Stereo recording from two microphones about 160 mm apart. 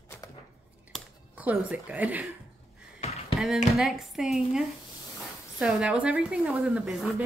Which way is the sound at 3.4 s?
Centre (ahead or behind).